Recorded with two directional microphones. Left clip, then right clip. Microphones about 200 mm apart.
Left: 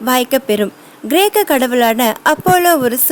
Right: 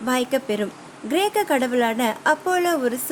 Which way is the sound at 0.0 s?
45° left (ahead or behind).